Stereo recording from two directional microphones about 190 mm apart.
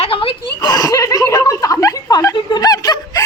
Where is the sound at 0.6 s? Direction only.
20° left (ahead or behind).